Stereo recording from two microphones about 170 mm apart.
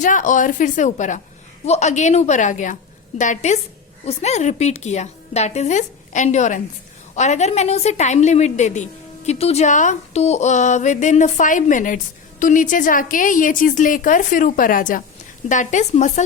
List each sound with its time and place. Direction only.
0.0 s a woman's voice: 50° left (ahead or behind)